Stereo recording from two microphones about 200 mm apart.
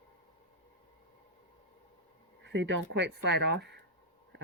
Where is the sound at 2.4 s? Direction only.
65° right (ahead or behind).